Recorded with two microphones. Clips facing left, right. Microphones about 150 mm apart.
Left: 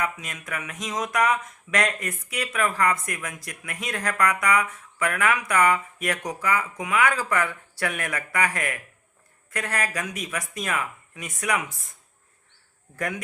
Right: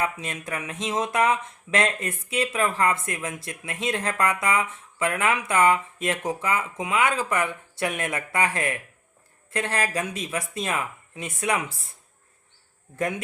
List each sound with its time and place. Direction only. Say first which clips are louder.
0.0 s speech: right 2 dB; 30° right (ahead or behind)
13.0 s speech: right 3 dB; 25° right (ahead or behind)